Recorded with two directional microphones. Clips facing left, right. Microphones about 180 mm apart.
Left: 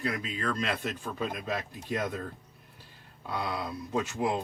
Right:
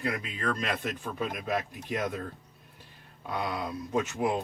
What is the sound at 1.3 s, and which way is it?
Speech, 15° right (ahead or behind).